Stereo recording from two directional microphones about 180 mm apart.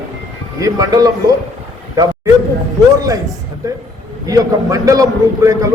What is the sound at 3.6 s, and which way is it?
A man's voice, 20° right (ahead or behind).